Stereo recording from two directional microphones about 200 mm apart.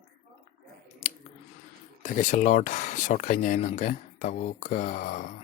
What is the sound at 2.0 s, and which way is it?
Speech, 40° left (ahead or behind).